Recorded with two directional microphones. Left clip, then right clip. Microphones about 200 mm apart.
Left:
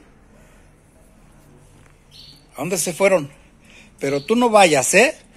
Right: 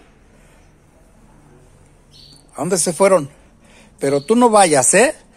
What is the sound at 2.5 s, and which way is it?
Speech, 25° right (ahead or behind).